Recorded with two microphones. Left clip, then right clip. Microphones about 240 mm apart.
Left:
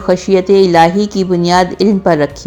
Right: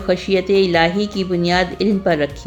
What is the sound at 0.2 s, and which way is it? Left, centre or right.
Speech, centre.